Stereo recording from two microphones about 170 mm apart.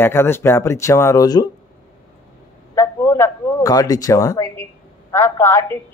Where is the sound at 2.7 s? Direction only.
15° left (ahead or behind).